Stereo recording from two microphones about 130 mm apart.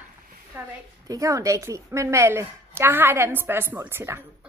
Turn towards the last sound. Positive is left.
turn(degrees=-15)  # may be behind; listen again after turning